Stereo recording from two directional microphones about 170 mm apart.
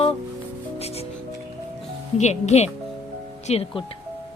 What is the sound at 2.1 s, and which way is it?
Speech, 40° left (ahead or behind).